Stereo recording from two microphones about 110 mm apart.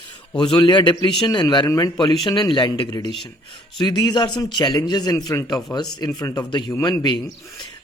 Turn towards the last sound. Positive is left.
turn(degrees=40)  # may be behind; listen again after turning